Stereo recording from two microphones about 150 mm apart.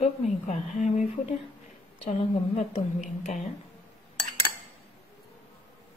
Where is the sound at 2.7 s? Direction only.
55° left (ahead or behind).